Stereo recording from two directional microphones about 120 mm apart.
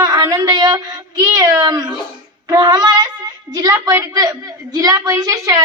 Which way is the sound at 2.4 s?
35° right (ahead or behind).